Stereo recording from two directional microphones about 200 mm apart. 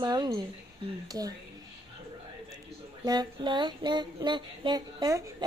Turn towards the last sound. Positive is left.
turn(degrees=-20)  # may be behind; listen again after turning